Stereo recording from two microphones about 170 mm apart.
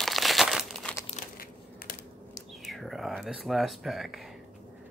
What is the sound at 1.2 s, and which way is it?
Crushing, 45° left (ahead or behind).